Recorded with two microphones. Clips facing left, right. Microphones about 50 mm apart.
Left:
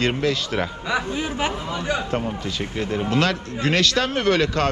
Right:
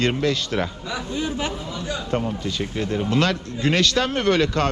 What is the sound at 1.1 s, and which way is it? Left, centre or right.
Speech, centre.